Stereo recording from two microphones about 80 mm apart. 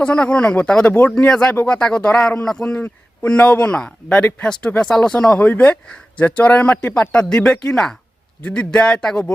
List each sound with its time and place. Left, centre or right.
0.0 s speech: centre
5.4 s speech: centre